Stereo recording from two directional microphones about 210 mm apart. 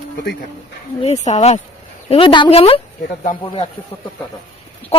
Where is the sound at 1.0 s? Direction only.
35° left (ahead or behind).